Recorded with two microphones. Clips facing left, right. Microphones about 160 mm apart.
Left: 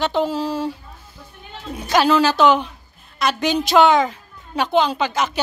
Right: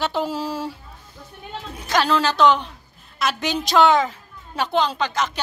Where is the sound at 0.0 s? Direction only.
5° right (ahead or behind).